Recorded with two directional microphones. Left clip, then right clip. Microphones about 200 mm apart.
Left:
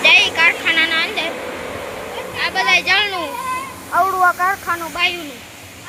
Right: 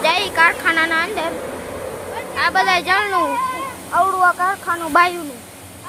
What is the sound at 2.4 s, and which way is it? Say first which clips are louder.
Speech: even; 25° right (ahead or behind).